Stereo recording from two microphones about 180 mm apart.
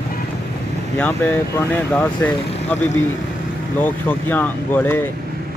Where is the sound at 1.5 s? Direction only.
10° left (ahead or behind).